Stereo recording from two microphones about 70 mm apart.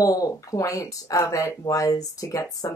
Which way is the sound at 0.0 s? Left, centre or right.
Left.